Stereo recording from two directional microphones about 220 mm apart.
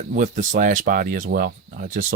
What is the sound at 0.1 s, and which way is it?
Speech, 35° right (ahead or behind).